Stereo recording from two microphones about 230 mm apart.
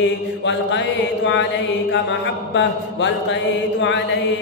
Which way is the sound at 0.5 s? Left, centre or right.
Left.